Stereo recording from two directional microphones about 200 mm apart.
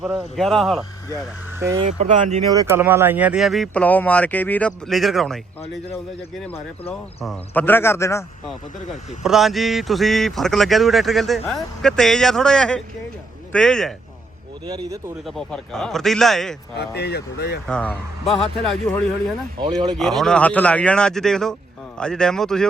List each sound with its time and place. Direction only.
0.0 s speech: centre (ahead or behind)
1.5 s speech: 15° right (ahead or behind)
1.9 s speech: 35° right (ahead or behind)
2.5 s speech: 15° right (ahead or behind)
6.4 s speech: 5° left (ahead or behind)
8.9 s speech: centre (ahead or behind)
15.3 s speech: 5° left (ahead or behind)
16.7 s speech: 55° left (ahead or behind)
17.7 s speech: 5° left (ahead or behind)